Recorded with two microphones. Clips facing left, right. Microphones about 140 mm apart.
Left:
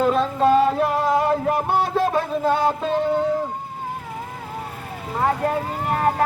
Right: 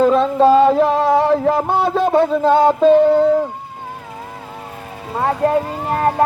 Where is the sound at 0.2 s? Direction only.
30° right (ahead or behind).